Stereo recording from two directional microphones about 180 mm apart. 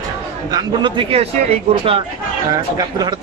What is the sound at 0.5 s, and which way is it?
Speech, 25° right (ahead or behind).